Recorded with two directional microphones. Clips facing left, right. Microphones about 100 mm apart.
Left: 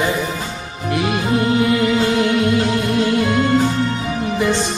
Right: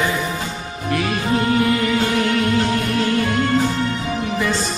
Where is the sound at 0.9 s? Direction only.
20° left (ahead or behind).